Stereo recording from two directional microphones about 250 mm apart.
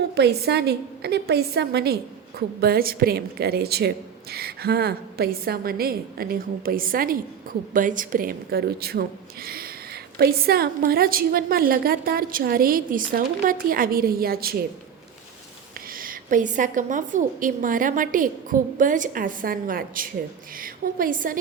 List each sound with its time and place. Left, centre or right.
0.1 s speech: right
15.9 s speech: right